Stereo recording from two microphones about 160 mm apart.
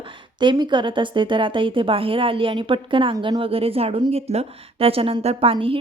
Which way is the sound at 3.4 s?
35° right (ahead or behind).